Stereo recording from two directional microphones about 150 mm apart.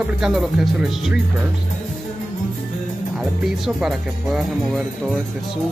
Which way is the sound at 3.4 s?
Centre (ahead or behind).